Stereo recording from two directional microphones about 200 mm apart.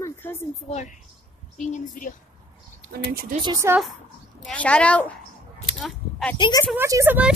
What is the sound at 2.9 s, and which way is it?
Speech, 50° right (ahead or behind).